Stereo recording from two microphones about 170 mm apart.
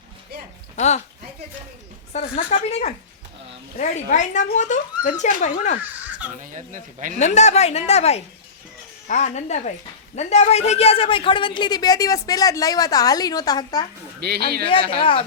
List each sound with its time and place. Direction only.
0.8 s speech: 45° left (ahead or behind)
2.1 s a woman's voice: 40° left (ahead or behind)
6.4 s speech: 50° right (ahead or behind)
7.2 s a woman's voice: 40° left (ahead or behind); by 13.8 s 25° left (ahead or behind)
14.2 s a man's voice: 70° right (ahead or behind)